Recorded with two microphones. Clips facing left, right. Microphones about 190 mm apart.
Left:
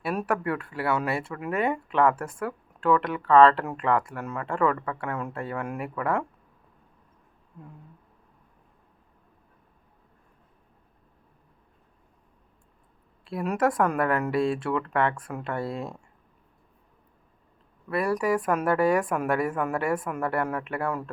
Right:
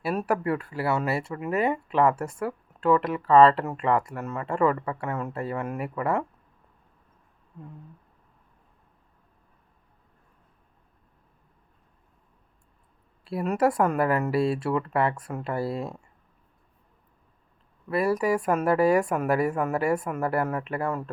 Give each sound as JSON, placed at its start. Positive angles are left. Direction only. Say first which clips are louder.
{"t": 0.3, "sound": "speech", "louder": "right 3 dB", "side_deg": -25}
{"t": 0.7, "sound": "speech", "louder": "left 2 dB", "side_deg": 0}
{"t": 13.3, "sound": "speech", "louder": "right 1 dB", "side_deg": -5}
{"t": 17.8, "sound": "speech", "louder": "right 1 dB", "side_deg": 0}